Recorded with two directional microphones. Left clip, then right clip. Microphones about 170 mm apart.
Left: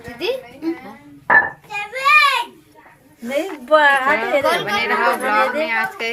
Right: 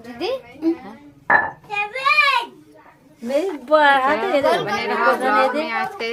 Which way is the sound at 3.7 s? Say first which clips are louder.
Left 1 dB; 75° right (ahead or behind).